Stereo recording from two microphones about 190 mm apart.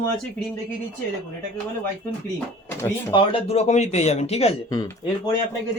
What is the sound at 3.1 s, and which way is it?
A man's voice, 25° left (ahead or behind).